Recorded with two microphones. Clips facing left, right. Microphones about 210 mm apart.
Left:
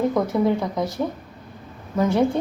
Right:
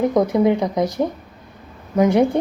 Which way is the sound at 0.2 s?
15° right (ahead or behind).